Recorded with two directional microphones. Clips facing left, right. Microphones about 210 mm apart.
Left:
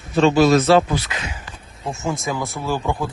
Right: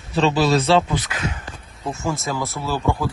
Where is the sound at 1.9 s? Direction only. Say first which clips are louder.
Left 1 dB; 25° left (ahead or behind).